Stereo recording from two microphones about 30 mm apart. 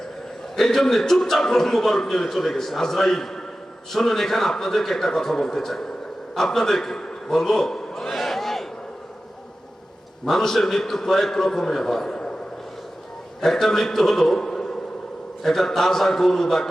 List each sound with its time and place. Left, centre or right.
0.5 s a man's voice: centre
10.2 s a man's voice: centre
12.0 s a sound: left
13.4 s a man's voice: centre